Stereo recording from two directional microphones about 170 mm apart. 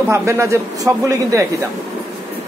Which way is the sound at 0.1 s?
15° right (ahead or behind).